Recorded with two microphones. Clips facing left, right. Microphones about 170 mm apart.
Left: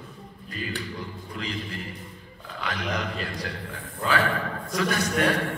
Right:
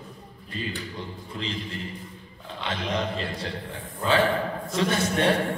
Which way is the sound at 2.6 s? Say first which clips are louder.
Right 2 dB; 25° right (ahead or behind).